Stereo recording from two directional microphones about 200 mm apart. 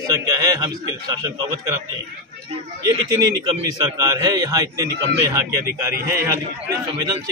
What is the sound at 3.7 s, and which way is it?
A man's voice, 20° right (ahead or behind).